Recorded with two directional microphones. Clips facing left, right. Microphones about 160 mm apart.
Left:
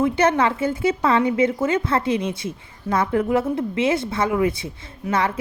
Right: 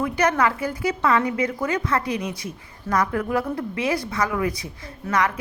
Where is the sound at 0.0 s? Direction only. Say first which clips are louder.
Left 3 dB; 25° left (ahead or behind).